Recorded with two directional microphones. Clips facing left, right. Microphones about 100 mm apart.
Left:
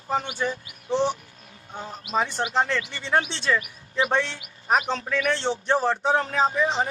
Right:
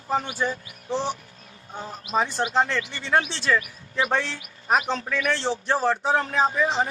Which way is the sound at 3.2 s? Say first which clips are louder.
Right 1 dB; 30° left (ahead or behind).